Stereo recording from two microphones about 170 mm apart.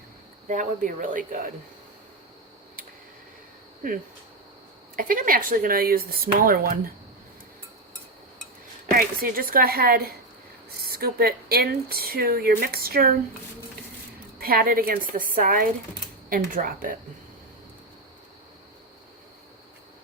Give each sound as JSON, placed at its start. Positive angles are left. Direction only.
{"t": 0.4, "sound": "speech", "side_deg": -50}
{"t": 3.8, "sound": "speech", "side_deg": -50}
{"t": 8.9, "sound": "speech", "side_deg": -60}
{"t": 14.3, "sound": "speech", "side_deg": -60}